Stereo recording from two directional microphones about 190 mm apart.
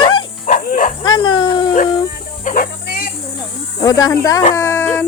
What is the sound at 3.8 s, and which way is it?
Speech, 20° left (ahead or behind).